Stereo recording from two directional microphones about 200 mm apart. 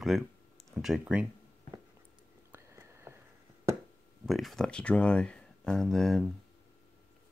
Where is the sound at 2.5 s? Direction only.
15° right (ahead or behind).